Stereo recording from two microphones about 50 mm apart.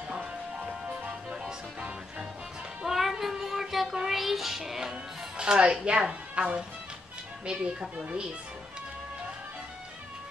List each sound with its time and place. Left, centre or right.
2.8 s child singing: centre
3.9 s music: centre
5.4 s a woman's voice: centre